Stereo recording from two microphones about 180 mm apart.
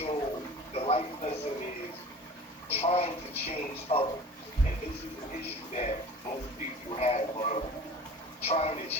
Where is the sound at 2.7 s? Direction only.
35° left (ahead or behind).